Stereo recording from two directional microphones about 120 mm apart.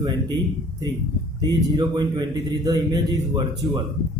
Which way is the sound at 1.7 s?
40° right (ahead or behind).